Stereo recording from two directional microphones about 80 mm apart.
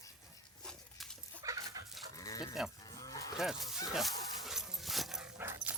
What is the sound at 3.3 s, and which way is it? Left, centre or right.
Speech, centre.